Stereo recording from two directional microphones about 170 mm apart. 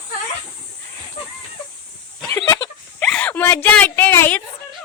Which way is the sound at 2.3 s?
20° left (ahead or behind).